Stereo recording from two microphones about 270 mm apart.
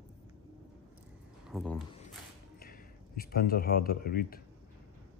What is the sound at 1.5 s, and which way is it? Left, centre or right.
Speech, centre.